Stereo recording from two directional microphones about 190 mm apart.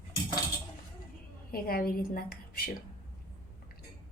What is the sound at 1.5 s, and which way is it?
A woman's voice, 50° left (ahead or behind).